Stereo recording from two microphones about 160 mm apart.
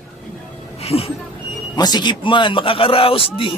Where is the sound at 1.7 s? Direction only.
25° left (ahead or behind).